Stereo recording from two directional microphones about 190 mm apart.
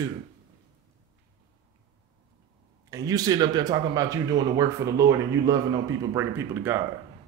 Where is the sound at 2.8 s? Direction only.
20° right (ahead or behind).